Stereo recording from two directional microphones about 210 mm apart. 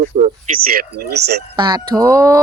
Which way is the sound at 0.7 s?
45° right (ahead or behind).